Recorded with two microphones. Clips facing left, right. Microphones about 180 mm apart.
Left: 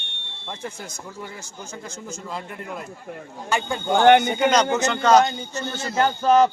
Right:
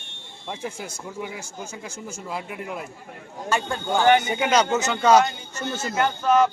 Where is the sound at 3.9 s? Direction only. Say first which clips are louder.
Left 4 dB; 60° left (ahead or behind).